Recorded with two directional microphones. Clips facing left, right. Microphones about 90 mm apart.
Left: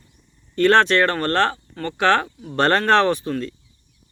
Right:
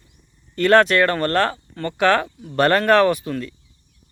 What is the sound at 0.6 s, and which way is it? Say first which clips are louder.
Speech: right 1 dB; 25° left (ahead or behind).